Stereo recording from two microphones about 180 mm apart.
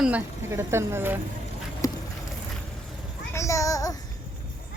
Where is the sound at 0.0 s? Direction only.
10° right (ahead or behind).